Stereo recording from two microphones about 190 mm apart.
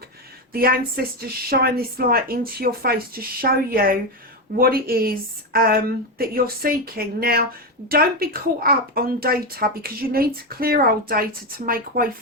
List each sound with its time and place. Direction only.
0.5 s speech: 50° right (ahead or behind)